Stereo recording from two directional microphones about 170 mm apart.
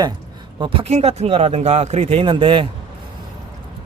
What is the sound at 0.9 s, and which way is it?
A man's voice, 40° right (ahead or behind).